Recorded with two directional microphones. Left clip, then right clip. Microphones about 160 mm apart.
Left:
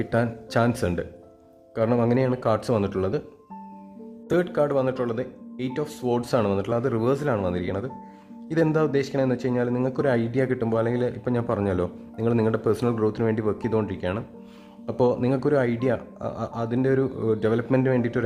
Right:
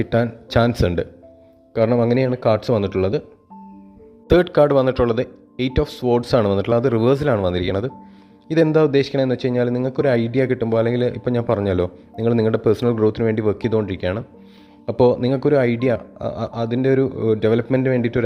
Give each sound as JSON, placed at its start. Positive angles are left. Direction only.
{"t": 0.0, "sound": "a man's voice", "side_deg": -25}
{"t": 4.3, "sound": "a man's voice", "side_deg": -35}